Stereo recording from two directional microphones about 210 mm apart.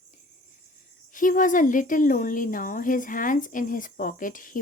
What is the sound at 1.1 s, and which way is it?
Speech, 40° left (ahead or behind).